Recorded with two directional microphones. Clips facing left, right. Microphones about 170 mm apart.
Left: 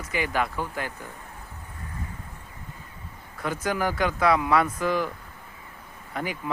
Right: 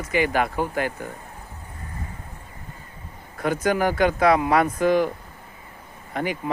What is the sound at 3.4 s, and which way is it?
Speech, 55° right (ahead or behind).